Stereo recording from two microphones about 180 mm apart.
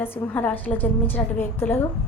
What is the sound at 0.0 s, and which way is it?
A woman's voice, 10° left (ahead or behind).